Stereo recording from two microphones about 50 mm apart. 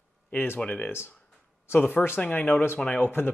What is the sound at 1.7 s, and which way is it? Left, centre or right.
Speech, left.